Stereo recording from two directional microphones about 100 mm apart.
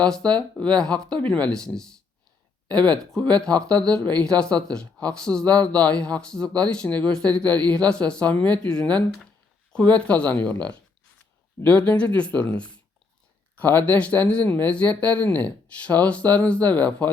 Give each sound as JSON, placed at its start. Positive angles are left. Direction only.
{"t": 0.0, "sound": "speech", "side_deg": 10}